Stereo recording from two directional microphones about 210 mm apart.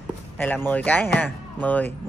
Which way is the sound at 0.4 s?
10° left (ahead or behind).